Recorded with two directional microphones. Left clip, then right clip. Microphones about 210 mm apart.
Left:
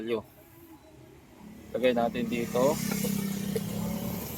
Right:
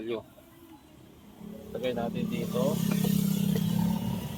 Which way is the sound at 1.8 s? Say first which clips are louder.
Left 6 dB; 45° left (ahead or behind).